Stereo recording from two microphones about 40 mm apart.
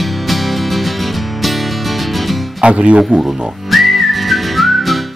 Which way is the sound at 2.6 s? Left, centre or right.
Right.